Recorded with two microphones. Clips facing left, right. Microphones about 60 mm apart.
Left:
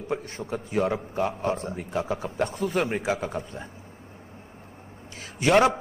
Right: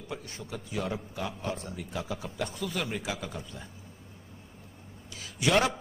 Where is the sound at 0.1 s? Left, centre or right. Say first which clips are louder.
Left 9 dB; left.